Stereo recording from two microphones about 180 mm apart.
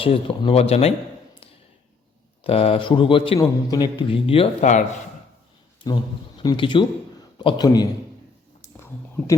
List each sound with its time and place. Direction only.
0.0 s speech: 30° left (ahead or behind)
2.4 s a man's voice: 35° left (ahead or behind)
6.4 s a man's voice: 25° left (ahead or behind)
8.6 s a sound: 15° left (ahead or behind)